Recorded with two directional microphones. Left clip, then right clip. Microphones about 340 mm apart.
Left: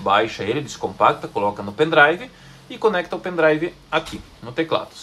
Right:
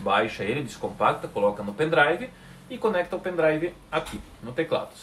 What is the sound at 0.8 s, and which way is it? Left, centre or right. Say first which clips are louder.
Speech: left 7 dB; left.